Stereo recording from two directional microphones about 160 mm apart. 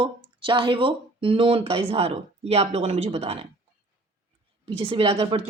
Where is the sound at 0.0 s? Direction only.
30° right (ahead or behind).